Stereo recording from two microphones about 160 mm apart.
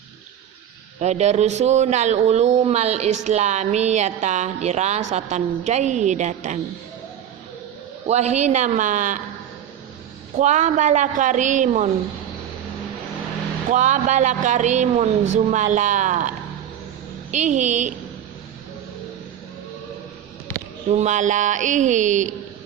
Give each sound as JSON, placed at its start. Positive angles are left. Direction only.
{"t": 0.9, "sound": "speech", "side_deg": -45}
{"t": 8.0, "sound": "speech", "side_deg": -45}
{"t": 10.3, "sound": "speech", "side_deg": -50}
{"t": 13.7, "sound": "speech", "side_deg": -50}
{"t": 17.3, "sound": "speech", "side_deg": -50}
{"t": 20.9, "sound": "speech", "side_deg": -45}